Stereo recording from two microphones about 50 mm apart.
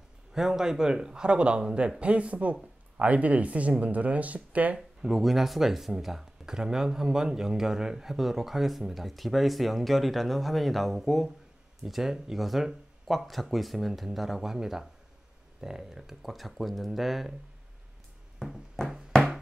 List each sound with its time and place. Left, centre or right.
0.3 s speech: centre; by 4.7 s right
4.7 s speech: centre